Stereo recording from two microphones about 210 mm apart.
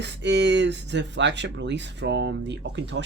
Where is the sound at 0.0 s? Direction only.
55° right (ahead or behind).